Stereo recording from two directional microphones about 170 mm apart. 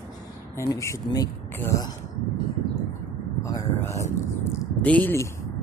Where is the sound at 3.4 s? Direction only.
20° left (ahead or behind).